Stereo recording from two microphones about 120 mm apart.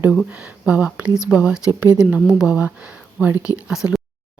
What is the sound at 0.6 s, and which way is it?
Speech, 10° right (ahead or behind).